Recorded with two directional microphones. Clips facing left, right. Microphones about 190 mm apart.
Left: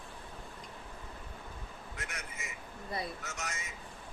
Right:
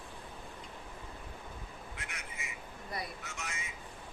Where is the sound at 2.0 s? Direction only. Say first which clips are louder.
Left 6 dB; 45° left (ahead or behind).